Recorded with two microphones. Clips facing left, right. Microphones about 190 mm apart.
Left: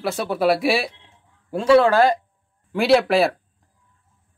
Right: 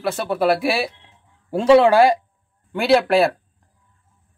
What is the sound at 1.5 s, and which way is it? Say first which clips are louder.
Speech: right 2 dB; 20° right (ahead or behind).